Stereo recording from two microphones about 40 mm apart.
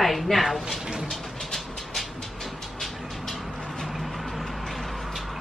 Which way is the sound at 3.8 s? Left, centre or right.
Centre.